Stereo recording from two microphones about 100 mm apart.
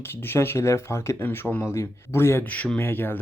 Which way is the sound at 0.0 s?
25° left (ahead or behind).